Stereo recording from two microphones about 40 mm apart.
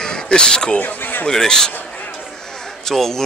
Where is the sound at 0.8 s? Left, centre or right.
Left.